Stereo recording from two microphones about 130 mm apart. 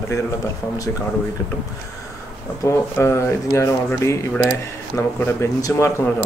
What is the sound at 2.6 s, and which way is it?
Speech, 20° left (ahead or behind).